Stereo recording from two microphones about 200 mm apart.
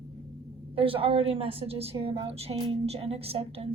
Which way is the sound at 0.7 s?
25° right (ahead or behind).